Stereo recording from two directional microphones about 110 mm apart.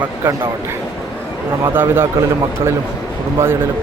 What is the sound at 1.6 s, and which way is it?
Speech, 20° right (ahead or behind).